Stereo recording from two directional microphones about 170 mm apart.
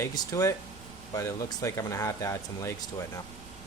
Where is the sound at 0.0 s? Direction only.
20° left (ahead or behind).